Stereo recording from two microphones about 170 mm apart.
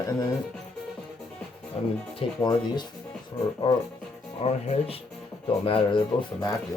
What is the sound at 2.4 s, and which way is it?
Speech, 25° left (ahead or behind).